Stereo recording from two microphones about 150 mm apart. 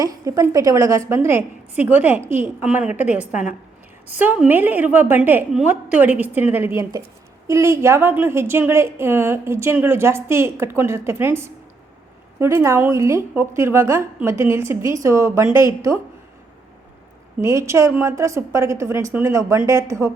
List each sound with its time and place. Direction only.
0.3 s a woman's voice: 25° right (ahead or behind)
17.4 s a woman's voice: 20° right (ahead or behind)